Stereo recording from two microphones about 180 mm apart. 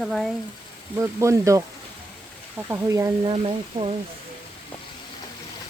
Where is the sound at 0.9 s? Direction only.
15° right (ahead or behind).